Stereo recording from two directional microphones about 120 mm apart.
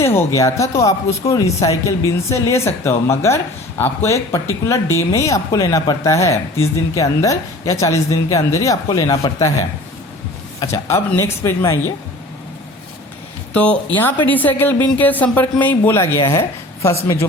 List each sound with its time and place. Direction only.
0.0 s speech: 20° left (ahead or behind)
10.6 s speech: 25° left (ahead or behind)
13.5 s speech: 10° left (ahead or behind)
16.4 s a sound: 25° left (ahead or behind)